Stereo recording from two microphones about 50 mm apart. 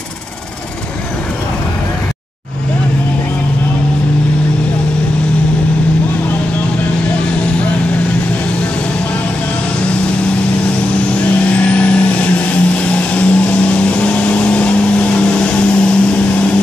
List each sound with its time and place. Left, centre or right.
11.1 s vehicle: left